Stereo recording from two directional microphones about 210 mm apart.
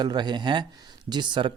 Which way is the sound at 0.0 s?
20° right (ahead or behind).